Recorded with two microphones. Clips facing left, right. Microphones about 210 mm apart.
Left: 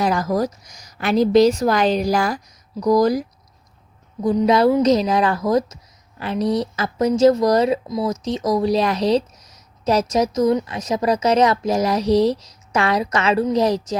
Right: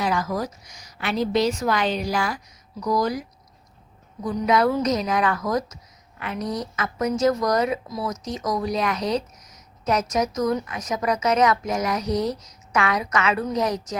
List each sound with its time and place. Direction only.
0.0 s a woman's voice: 40° left (ahead or behind)